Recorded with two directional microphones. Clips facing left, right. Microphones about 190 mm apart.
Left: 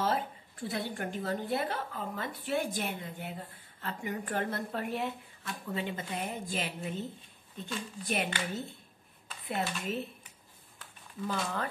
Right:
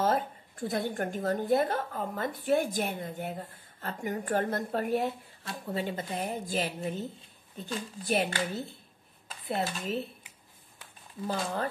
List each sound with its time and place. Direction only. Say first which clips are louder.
0.0 s a woman's voice: right 4 dB; 45° right (ahead or behind)
9.5 s speech: right 2 dB; 35° right (ahead or behind)
11.2 s speech: right 2 dB; 35° right (ahead or behind)